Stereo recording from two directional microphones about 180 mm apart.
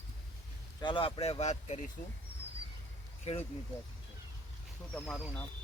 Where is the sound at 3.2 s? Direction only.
35° left (ahead or behind).